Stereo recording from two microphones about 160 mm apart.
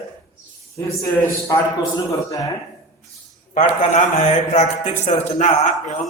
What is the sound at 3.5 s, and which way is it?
A man's voice, 50° left (ahead or behind).